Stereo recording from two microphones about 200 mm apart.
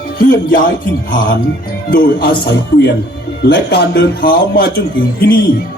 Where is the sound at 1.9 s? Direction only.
55° left (ahead or behind).